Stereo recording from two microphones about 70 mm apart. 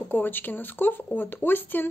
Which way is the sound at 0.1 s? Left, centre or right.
Left.